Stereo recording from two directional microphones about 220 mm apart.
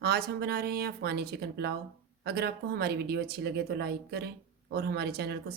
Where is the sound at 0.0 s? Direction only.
45° right (ahead or behind).